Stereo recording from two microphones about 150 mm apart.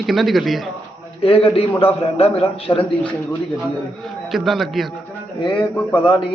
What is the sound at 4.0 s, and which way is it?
Speech, centre (ahead or behind).